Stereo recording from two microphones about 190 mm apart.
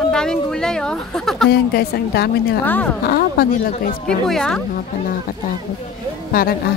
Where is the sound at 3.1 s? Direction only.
55° left (ahead or behind).